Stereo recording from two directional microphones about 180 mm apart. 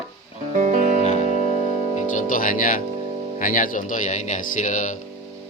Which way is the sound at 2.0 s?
45° left (ahead or behind).